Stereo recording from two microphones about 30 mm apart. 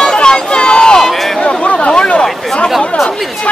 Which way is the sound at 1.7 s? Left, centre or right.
Left.